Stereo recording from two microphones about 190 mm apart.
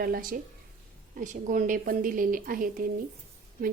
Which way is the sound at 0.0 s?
50° right (ahead or behind).